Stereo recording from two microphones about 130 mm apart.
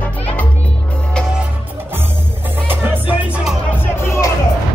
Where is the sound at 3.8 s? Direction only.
20° left (ahead or behind).